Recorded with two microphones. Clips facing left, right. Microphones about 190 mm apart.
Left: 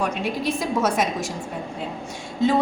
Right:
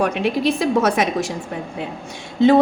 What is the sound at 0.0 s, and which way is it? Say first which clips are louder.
A woman's voice: right 6 dB; 65° right (ahead or behind).